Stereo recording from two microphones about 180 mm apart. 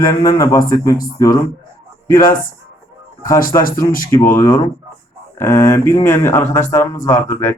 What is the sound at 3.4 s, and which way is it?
Speech, 50° left (ahead or behind).